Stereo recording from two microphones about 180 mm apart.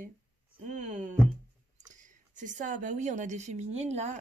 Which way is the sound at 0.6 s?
45° right (ahead or behind).